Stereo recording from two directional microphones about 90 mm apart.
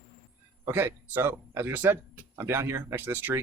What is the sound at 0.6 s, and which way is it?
Speech, 25° right (ahead or behind).